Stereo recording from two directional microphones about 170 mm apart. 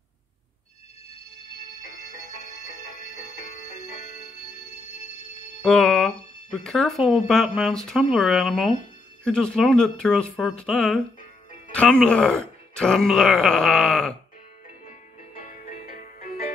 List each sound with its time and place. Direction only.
3.5 s music: 45° left (ahead or behind)
5.6 s speech: centre (ahead or behind)
15.3 s music: 50° left (ahead or behind)